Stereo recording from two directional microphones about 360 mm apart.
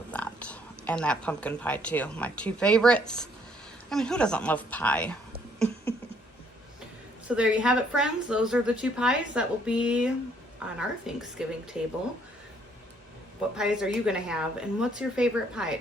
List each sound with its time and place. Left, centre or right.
0.1 s speech: centre
7.3 s speech: centre
13.6 s speech: centre